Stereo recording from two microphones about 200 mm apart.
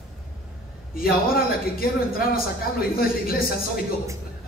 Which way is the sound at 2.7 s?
50° left (ahead or behind).